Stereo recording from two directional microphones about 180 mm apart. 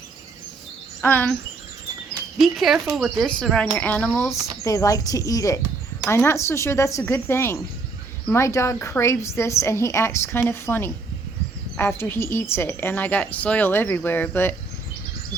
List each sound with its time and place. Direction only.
1.0 s speech: 10° left (ahead or behind)
2.4 s speech: centre (ahead or behind)